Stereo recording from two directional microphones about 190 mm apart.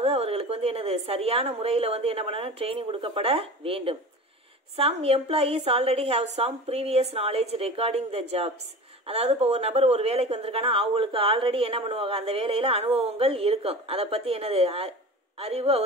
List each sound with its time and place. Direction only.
0.0 s a woman's voice: 30° right (ahead or behind)